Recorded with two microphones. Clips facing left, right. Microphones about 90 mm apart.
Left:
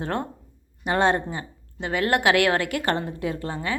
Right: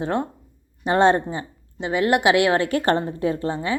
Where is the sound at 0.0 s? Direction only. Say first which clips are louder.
Right 4 dB; 20° right (ahead or behind).